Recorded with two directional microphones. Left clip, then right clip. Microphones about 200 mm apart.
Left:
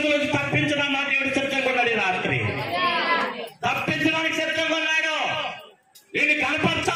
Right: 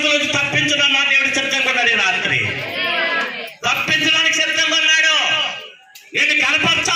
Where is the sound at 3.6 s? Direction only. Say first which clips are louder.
Right 7 dB; 55° left (ahead or behind).